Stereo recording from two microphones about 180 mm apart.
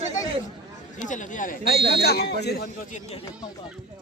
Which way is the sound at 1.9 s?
65° left (ahead or behind).